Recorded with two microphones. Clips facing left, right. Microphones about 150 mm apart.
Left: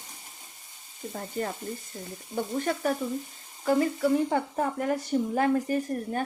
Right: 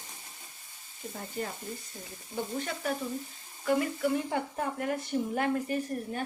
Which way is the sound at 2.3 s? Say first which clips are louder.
Left 4 dB; 20° left (ahead or behind).